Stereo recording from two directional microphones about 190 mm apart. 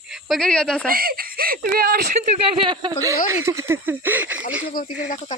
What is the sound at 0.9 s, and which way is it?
Speech, 50° right (ahead or behind).